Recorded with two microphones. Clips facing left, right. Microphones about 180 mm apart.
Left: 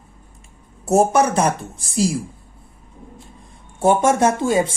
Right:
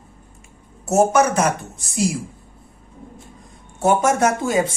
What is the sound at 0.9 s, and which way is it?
Speech, 30° left (ahead or behind).